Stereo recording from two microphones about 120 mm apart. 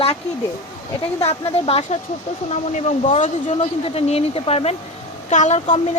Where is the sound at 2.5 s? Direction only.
75° left (ahead or behind).